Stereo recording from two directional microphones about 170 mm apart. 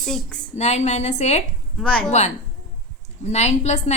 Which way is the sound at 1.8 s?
5° left (ahead or behind).